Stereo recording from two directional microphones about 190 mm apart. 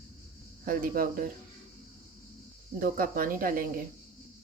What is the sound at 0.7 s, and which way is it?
Speech, 50° right (ahead or behind).